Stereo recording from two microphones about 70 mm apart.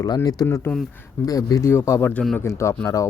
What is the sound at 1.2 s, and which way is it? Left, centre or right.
Speech, left.